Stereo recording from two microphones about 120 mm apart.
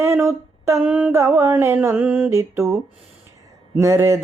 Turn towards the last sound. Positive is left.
turn(degrees=-25)  # may be behind; listen again after turning